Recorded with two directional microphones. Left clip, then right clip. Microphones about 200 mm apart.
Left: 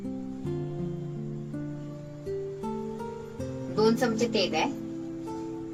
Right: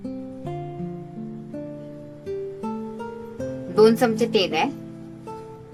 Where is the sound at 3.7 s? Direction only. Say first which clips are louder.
Right 8 dB; 45° right (ahead or behind).